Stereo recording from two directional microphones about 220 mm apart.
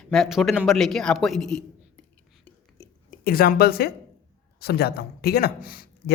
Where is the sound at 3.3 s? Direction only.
40° left (ahead or behind).